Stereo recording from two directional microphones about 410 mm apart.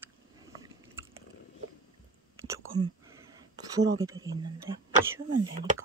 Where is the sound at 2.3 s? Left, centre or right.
Centre.